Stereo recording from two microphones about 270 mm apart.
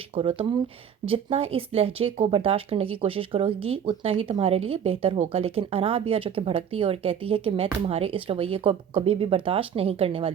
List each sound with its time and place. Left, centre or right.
0.1 s speech: centre